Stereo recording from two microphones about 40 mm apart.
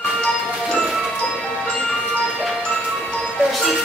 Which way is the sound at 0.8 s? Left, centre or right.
Centre.